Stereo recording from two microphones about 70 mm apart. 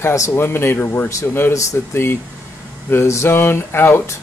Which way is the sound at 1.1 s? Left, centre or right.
Left.